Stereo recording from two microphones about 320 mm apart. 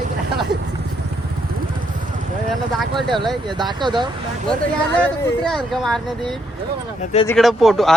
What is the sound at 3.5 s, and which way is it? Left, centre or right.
Speech, centre.